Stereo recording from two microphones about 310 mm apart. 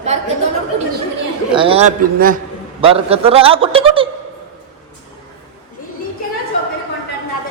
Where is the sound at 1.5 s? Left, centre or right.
Centre.